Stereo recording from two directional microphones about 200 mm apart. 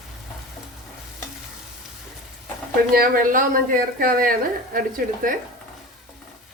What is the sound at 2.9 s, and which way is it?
Speech, 45° right (ahead or behind).